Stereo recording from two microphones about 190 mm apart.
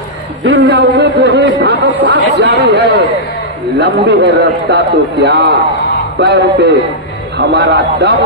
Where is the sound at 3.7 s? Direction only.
70° right (ahead or behind).